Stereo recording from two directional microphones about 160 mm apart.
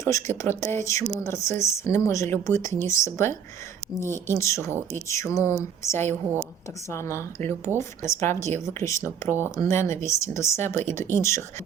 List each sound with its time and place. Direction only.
0.0 s speech: 20° left (ahead or behind)